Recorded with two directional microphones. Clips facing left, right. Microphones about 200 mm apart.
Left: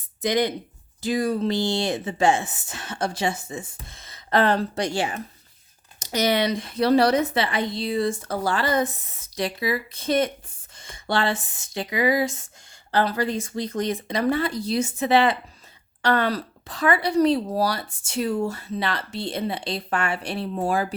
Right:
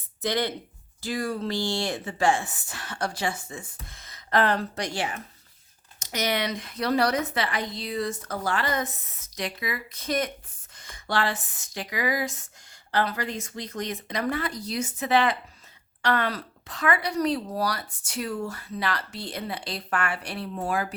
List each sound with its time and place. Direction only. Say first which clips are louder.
0.2 s a woman's voice: left 5 dB; 15° left (ahead or behind); by 20.8 s 30° left (ahead or behind)